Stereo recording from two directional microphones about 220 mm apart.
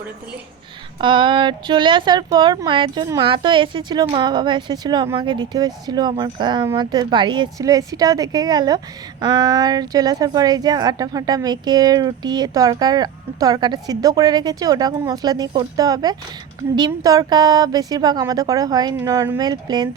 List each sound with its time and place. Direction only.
1.0 s a woman's voice: 20° right (ahead or behind)